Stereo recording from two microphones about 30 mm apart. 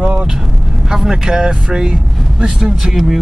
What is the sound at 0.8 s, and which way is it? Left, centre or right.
Speech, centre.